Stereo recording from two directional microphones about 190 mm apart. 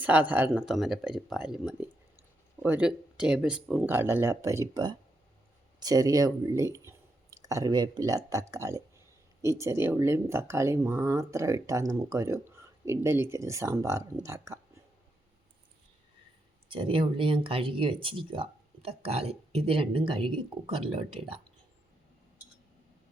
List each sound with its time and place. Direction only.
0.0 s speech: 10° right (ahead or behind)
16.6 s speech: 25° right (ahead or behind)